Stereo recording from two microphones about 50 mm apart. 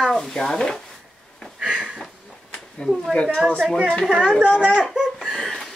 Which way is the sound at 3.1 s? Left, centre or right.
Left.